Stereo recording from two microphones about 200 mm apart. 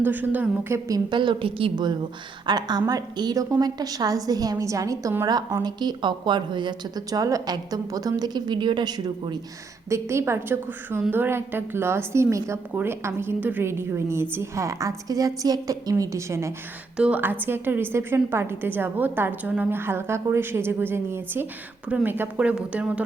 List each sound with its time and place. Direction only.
0.0 s a woman's voice: 10° right (ahead or behind)